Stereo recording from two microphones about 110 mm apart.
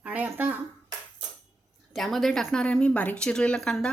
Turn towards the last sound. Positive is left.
turn(degrees=5)  # may be behind; listen again after turning